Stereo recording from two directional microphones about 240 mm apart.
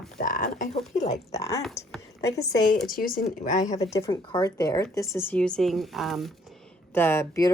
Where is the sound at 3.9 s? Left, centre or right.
Centre.